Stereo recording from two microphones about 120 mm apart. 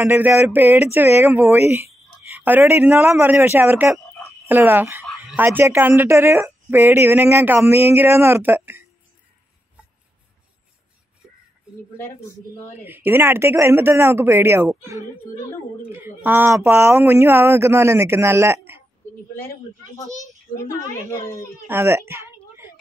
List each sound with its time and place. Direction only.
0.0 s speech: 20° right (ahead or behind)
12.8 s speech: 15° right (ahead or behind)
20.5 s a woman's voice: 25° left (ahead or behind)
21.6 s speech: 20° right (ahead or behind)